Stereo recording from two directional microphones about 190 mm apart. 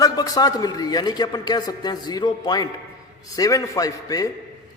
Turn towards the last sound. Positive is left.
turn(degrees=20)  # may be behind; listen again after turning